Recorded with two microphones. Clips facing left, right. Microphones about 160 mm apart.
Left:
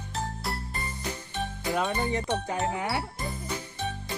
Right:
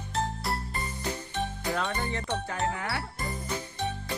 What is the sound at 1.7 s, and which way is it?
Music, 15° left (ahead or behind).